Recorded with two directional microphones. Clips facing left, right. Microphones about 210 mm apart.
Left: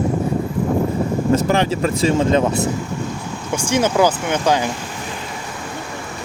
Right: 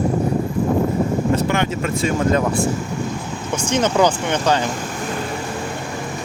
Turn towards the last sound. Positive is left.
turn(degrees=10)  # may be behind; listen again after turning